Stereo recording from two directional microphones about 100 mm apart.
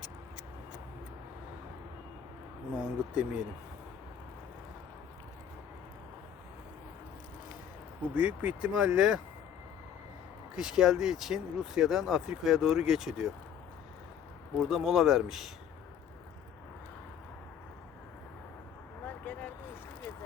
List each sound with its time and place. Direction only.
2.7 s speech: 10° right (ahead or behind)
8.1 s speech: 15° right (ahead or behind)
10.5 s speech: 5° right (ahead or behind)
14.6 s speech: 5° right (ahead or behind)
19.0 s a sound: 15° left (ahead or behind)